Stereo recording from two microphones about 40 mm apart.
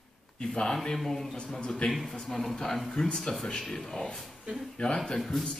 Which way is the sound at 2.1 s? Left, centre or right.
Centre.